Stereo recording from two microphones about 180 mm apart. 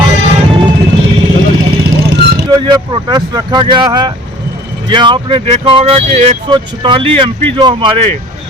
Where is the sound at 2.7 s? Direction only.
25° right (ahead or behind).